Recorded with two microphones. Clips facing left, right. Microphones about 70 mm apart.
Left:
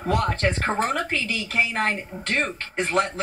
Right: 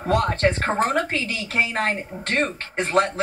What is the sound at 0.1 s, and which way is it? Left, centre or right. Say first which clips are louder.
Speech: right 3 dB; right.